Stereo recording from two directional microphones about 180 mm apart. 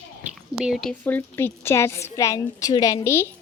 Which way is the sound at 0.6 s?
Centre (ahead or behind).